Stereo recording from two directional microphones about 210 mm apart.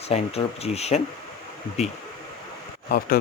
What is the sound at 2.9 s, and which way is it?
Speech, 45° left (ahead or behind).